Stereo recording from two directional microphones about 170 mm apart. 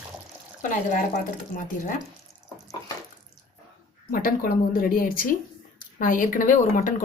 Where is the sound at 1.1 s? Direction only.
50° left (ahead or behind).